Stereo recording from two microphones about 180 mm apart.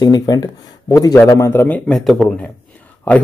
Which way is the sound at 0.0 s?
20° left (ahead or behind).